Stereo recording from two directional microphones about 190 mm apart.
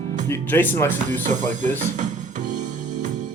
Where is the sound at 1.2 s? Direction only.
40° right (ahead or behind).